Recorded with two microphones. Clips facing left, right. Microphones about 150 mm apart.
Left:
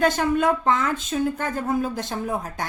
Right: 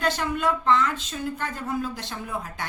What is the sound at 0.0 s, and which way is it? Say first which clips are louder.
Speech: left 5 dB; 50° left (ahead or behind).